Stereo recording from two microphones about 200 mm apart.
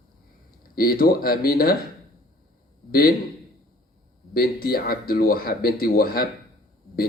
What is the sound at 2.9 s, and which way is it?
Speech, 50° left (ahead or behind).